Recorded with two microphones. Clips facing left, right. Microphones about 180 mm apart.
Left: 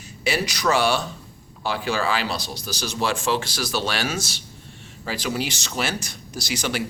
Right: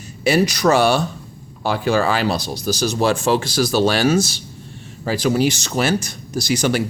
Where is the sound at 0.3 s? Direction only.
45° right (ahead or behind).